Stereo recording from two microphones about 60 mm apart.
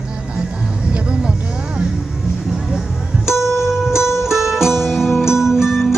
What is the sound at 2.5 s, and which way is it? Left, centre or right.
Music, centre.